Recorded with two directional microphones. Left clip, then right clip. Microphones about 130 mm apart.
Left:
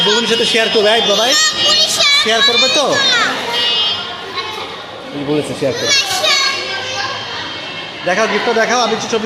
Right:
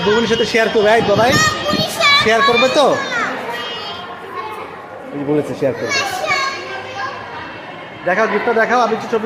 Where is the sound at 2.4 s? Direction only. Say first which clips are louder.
Even; 40° right (ahead or behind).